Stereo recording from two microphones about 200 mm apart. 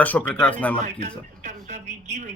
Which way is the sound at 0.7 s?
35° right (ahead or behind).